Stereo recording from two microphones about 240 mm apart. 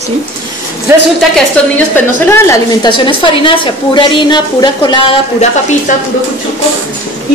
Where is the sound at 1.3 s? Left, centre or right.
Centre.